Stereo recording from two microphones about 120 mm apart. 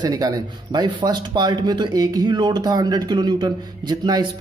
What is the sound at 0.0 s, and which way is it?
Speech, 35° right (ahead or behind).